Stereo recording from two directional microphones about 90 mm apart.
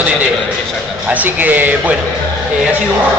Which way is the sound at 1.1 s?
20° right (ahead or behind).